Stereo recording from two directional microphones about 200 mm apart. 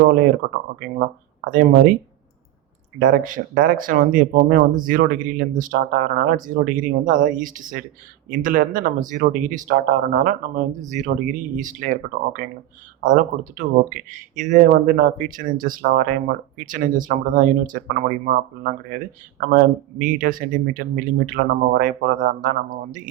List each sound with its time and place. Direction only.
1.5 s speech: 45° right (ahead or behind)
3.0 s speech: 45° right (ahead or behind)